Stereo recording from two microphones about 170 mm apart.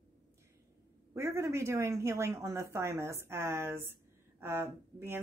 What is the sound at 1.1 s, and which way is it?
Speech, 15° right (ahead or behind).